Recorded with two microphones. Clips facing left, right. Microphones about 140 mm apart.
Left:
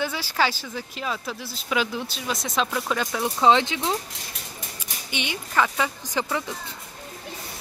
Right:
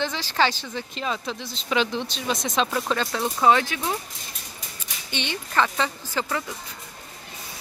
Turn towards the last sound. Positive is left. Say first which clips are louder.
# left 1 dB
turn(degrees=15)  # may be behind; listen again after turning